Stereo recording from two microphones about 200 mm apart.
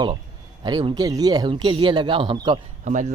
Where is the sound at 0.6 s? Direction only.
20° right (ahead or behind).